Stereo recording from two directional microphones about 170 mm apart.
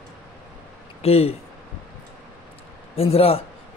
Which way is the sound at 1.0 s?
35° left (ahead or behind).